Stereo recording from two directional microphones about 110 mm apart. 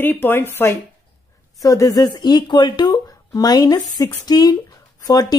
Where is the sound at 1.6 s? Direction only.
30° left (ahead or behind).